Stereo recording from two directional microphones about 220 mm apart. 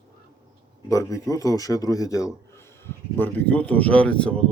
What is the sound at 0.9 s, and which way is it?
Speech, 15° left (ahead or behind).